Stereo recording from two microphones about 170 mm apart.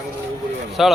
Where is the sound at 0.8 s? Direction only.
Centre (ahead or behind).